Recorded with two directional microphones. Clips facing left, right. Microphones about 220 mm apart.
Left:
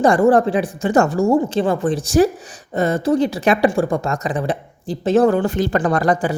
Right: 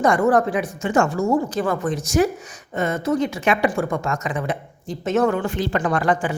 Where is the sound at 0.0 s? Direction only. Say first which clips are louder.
Left 4 dB; 30° left (ahead or behind).